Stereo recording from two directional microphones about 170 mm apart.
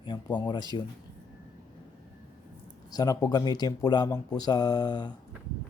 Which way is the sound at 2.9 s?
20° left (ahead or behind).